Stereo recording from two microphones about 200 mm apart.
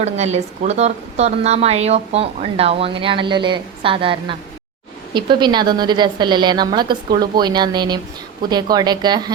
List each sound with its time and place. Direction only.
0.0 s a woman's voice: 35° right (ahead or behind)